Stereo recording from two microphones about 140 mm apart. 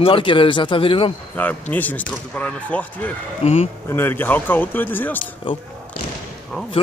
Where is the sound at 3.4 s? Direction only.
50° left (ahead or behind).